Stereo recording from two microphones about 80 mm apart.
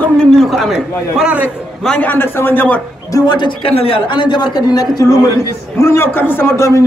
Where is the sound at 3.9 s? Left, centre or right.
Left.